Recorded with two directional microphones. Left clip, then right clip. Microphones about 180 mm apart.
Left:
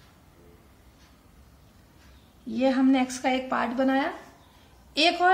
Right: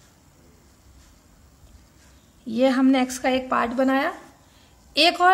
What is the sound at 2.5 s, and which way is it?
A woman's voice, 50° right (ahead or behind).